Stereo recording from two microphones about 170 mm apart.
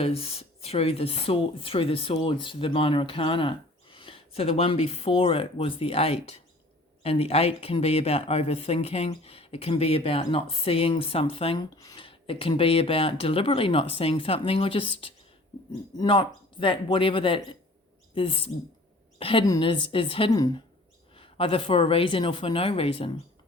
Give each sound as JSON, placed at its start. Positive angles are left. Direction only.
{"t": 0.0, "sound": "speech", "side_deg": 35}